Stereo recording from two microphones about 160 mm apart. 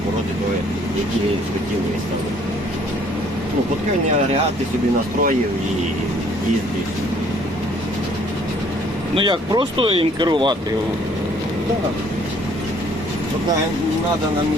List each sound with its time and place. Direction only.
9.1 s speech: 30° right (ahead or behind)